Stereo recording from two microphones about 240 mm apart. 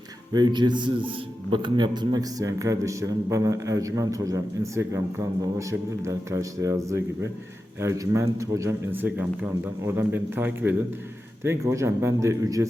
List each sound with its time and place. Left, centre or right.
0.3 s a man's voice: centre